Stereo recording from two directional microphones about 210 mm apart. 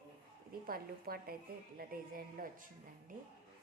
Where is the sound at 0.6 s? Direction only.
45° right (ahead or behind).